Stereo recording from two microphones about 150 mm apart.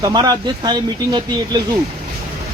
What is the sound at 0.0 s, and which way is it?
Speech, 25° right (ahead or behind).